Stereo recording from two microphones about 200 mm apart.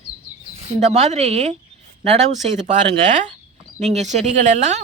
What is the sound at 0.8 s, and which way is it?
Speech, 35° right (ahead or behind).